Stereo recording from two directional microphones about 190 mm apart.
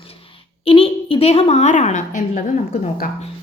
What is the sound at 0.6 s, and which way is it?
A woman's voice, 30° left (ahead or behind).